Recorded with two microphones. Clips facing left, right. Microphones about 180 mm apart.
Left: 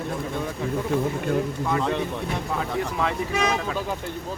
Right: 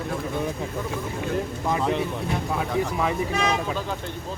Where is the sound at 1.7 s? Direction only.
15° right (ahead or behind).